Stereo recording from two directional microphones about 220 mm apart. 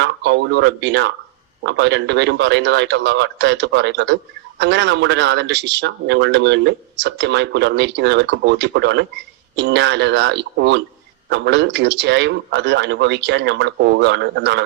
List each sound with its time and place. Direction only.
0.0 s speech: 50° right (ahead or behind)